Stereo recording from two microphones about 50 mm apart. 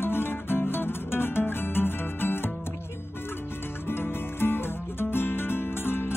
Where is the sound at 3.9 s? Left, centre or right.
Left.